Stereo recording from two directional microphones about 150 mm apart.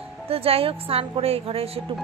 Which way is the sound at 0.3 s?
40° right (ahead or behind).